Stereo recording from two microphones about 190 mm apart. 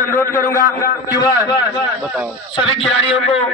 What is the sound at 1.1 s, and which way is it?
Speech, 20° left (ahead or behind).